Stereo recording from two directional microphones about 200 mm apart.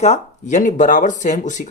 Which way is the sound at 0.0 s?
35° left (ahead or behind).